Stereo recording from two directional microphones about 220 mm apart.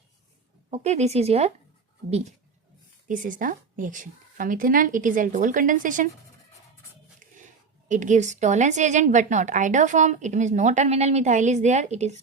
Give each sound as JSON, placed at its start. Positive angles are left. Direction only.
{"t": 0.7, "sound": "a woman's voice", "side_deg": -30}
{"t": 7.2, "sound": "a woman's voice", "side_deg": -35}